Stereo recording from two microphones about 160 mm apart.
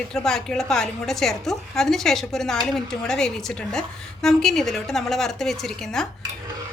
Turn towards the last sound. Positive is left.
turn(degrees=5)  # may be behind; listen again after turning